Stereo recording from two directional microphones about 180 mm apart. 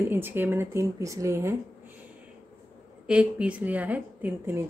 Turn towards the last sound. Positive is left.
turn(degrees=-10)  # may be behind; listen again after turning